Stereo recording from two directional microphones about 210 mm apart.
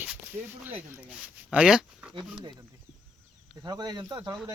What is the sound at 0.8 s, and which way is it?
Speech, 10° right (ahead or behind).